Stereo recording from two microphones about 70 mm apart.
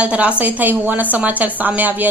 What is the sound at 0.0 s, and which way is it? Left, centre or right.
A woman's voice, centre.